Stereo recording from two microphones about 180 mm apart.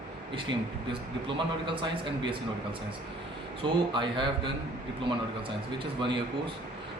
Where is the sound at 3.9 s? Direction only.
25° right (ahead or behind).